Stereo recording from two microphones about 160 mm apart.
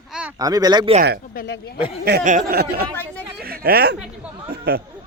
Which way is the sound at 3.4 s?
75° right (ahead or behind).